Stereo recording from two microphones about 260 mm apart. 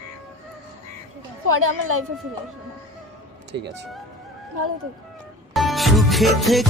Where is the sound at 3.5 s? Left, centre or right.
Right.